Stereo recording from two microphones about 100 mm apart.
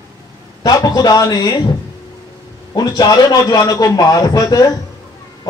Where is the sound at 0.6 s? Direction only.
40° left (ahead or behind).